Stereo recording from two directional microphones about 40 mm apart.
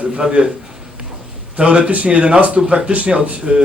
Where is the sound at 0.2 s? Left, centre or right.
Right.